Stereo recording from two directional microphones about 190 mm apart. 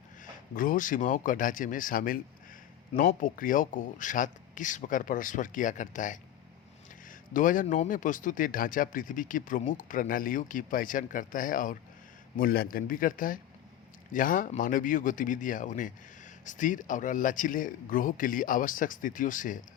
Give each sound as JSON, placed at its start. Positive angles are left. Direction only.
{"t": 0.5, "sound": "speech", "side_deg": 45}